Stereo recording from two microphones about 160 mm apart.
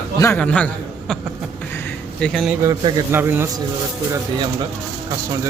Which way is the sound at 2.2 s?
Centre (ahead or behind).